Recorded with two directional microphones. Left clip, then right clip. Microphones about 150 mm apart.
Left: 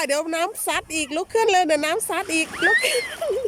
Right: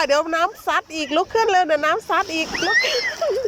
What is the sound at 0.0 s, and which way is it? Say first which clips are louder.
Speech: right 4 dB; 25° left (ahead or behind).